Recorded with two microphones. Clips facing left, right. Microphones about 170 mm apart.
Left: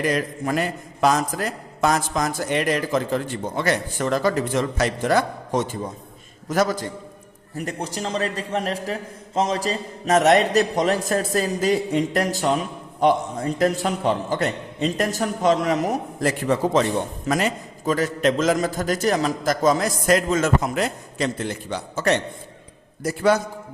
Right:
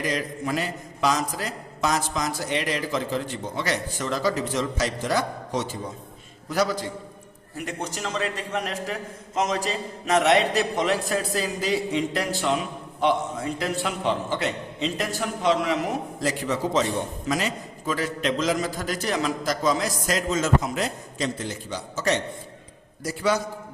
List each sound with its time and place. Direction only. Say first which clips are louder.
0.0 s a man's voice: left 4 dB; 50° left (ahead or behind)